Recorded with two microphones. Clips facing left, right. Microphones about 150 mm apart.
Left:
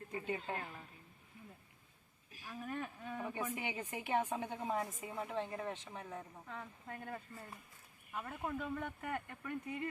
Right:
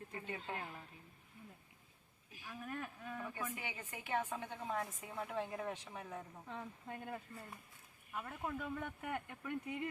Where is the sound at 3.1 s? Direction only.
15° left (ahead or behind).